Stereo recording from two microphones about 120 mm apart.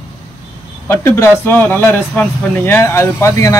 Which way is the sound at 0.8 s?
20° left (ahead or behind).